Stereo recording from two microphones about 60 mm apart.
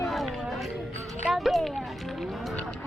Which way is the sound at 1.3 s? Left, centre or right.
Centre.